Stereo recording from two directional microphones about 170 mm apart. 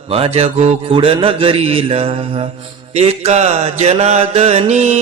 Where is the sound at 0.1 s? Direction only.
35° right (ahead or behind).